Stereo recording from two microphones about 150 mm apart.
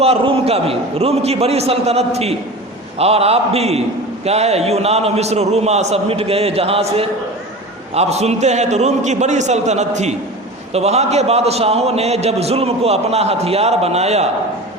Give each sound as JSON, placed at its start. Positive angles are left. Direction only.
{"t": 0.0, "sound": "a man's voice", "side_deg": -40}